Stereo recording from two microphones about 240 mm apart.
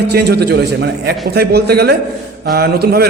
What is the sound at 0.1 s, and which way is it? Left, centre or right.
A man's voice, right.